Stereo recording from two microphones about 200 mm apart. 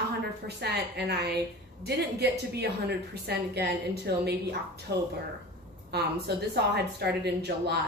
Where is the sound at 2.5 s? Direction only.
55° right (ahead or behind).